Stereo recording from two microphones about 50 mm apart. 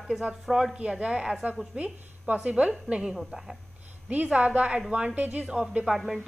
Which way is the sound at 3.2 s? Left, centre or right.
Centre.